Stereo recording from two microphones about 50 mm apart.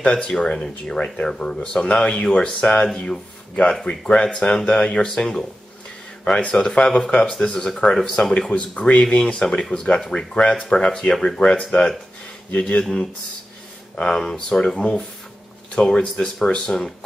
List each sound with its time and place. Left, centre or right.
0.0 s speech: left
4.1 s speech: centre
13.9 s speech: centre